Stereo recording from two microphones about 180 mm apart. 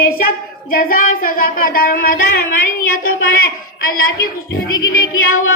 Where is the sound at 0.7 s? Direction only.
50° left (ahead or behind).